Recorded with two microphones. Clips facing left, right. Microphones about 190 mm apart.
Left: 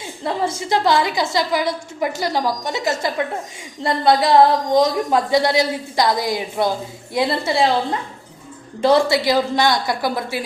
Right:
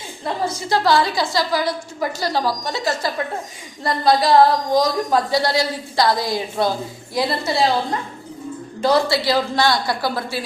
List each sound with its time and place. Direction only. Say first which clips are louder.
0.4 s a woman's voice: even; 20° left (ahead or behind)